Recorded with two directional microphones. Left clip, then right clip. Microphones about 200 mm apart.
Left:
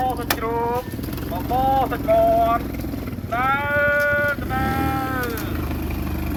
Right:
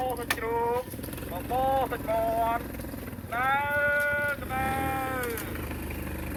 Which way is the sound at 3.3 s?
60° left (ahead or behind).